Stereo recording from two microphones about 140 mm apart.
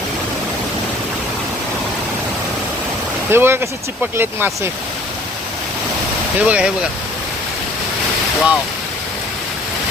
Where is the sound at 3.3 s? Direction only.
15° right (ahead or behind).